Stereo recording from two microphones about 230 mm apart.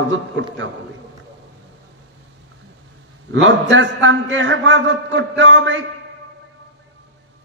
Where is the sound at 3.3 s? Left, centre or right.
Right.